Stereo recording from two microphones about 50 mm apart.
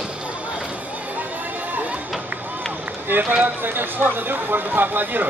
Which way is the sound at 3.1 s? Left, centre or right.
Right.